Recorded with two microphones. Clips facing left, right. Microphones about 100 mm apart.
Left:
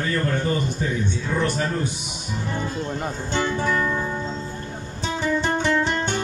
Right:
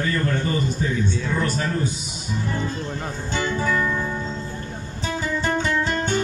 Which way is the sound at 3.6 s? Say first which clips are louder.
Even; 25° left (ahead or behind).